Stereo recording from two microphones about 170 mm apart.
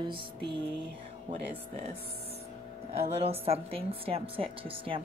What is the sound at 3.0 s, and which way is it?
A woman's voice, 35° right (ahead or behind).